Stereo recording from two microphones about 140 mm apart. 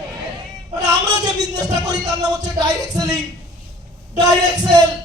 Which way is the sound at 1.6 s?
25° right (ahead or behind).